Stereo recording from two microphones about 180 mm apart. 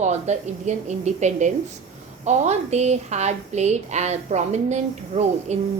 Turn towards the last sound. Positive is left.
turn(degrees=-40)  # may be behind; listen again after turning